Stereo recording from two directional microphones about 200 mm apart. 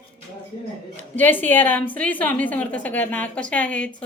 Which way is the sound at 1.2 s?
10° left (ahead or behind).